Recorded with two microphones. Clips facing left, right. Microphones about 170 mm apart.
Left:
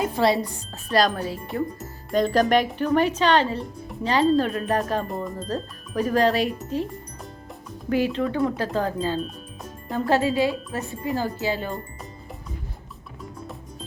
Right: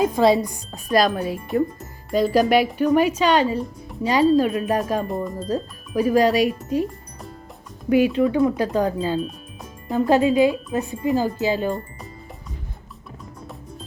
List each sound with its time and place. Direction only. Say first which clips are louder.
0.4 s speech: right 4 dB; 15° right (ahead or behind)
2.0 s speech: right 2 dB; 5° right (ahead or behind)
5.0 s speech: right 4 dB; centre (ahead or behind)
7.9 s speech: right 6 dB; 15° right (ahead or behind)